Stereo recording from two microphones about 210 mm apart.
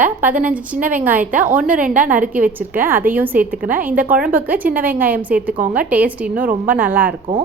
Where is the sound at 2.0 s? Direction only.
40° right (ahead or behind).